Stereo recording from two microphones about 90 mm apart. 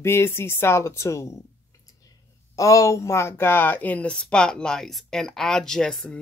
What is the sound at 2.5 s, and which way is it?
Speech, 35° left (ahead or behind).